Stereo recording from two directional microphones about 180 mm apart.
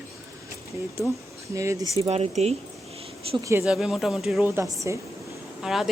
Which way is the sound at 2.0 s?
35° right (ahead or behind).